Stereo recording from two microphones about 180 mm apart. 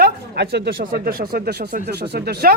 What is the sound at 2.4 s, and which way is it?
Speech, 55° right (ahead or behind).